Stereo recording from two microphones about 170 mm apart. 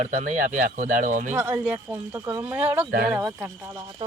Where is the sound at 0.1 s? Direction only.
50° right (ahead or behind).